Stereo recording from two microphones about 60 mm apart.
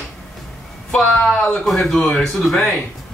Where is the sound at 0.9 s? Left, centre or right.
Centre.